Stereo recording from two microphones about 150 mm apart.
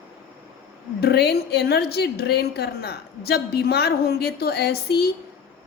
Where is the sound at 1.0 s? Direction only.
90° left.